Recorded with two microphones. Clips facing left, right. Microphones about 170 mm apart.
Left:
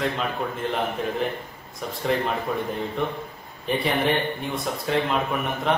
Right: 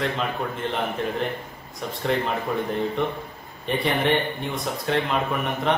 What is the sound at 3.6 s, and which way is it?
A man's voice, centre (ahead or behind).